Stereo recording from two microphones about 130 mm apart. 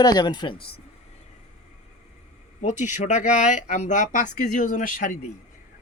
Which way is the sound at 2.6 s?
65° left (ahead or behind).